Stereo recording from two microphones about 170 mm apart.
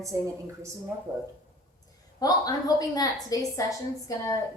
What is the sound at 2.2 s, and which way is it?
A woman's voice, 20° left (ahead or behind).